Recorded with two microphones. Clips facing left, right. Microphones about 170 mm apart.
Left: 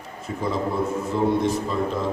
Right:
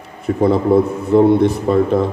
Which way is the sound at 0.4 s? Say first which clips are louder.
Right 11 dB; 60° right (ahead or behind).